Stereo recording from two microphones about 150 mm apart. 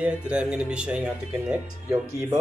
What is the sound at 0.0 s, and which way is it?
Speech, 5° right (ahead or behind).